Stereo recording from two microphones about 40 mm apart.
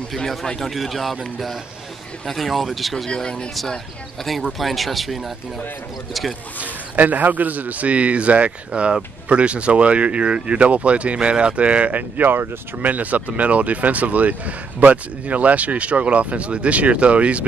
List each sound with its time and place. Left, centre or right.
0.6 s speech: centre
3.2 s speech: centre
4.5 s speech: centre
6.6 s speech: right
11.9 s speech: right